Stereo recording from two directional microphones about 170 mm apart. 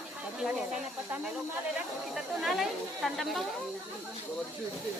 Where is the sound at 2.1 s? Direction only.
Centre (ahead or behind).